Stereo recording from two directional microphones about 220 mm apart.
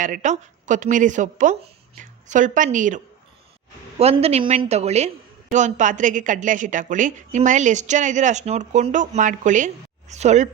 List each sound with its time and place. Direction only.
0.0 s a woman's voice: 35° right (ahead or behind)